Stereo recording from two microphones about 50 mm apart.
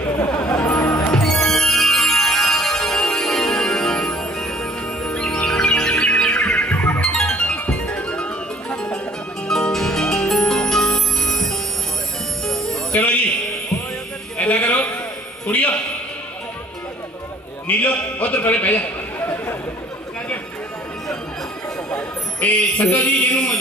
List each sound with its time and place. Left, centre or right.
0.3 s music: left
1.1 s music: centre; by 7.0 s left
7.0 s music: centre
7.3 s music: left; by 12.7 s centre
12.9 s music: left
14.4 s sheep: left
15.5 s music: left
17.6 s a sound: left
21.9 s music: left